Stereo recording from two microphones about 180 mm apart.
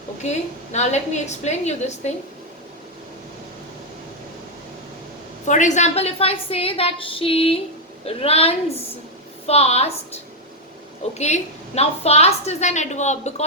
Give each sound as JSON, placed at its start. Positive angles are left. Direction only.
{"t": 0.2, "sound": "a woman's voice", "side_deg": 40}
{"t": 5.5, "sound": "a woman's voice", "side_deg": 40}
{"t": 11.1, "sound": "a woman's voice", "side_deg": 40}